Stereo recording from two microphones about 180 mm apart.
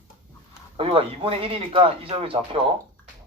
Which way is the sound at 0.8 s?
30° right (ahead or behind).